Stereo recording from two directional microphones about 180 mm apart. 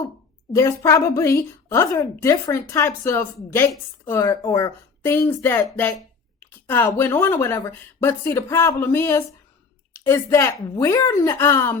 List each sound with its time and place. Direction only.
0.5 s a woman's voice: 15° left (ahead or behind)